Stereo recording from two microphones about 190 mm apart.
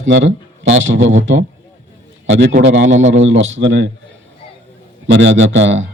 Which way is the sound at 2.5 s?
40° right (ahead or behind).